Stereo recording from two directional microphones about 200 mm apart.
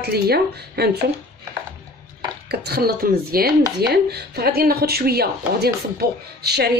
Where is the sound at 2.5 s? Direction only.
55° right (ahead or behind).